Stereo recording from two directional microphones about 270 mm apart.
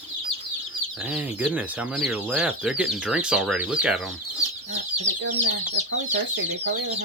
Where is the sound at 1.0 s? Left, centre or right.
Centre.